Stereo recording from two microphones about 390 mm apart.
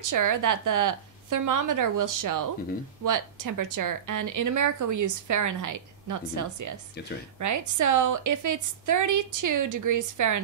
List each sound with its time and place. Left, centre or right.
0.0 s a woman's voice: right